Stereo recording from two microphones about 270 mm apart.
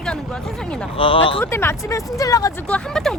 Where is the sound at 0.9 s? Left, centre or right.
Centre.